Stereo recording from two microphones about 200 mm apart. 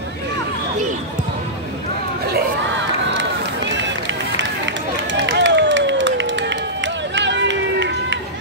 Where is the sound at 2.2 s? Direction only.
55° right (ahead or behind).